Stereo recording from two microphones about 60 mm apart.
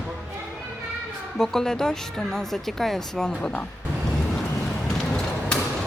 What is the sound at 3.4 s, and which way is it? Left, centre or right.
Speech, centre.